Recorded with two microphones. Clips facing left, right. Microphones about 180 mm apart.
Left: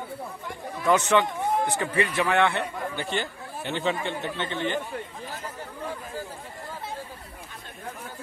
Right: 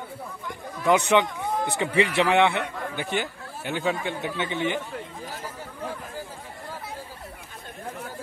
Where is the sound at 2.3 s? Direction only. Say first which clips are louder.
Right 2 dB; 15° right (ahead or behind).